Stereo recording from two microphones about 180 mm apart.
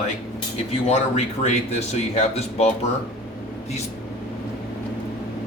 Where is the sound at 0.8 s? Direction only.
40° left (ahead or behind).